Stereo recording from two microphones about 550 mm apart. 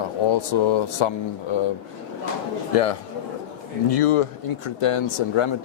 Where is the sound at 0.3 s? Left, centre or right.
Left.